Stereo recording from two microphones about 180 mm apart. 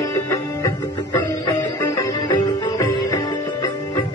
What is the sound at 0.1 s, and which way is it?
Music, 20° left (ahead or behind).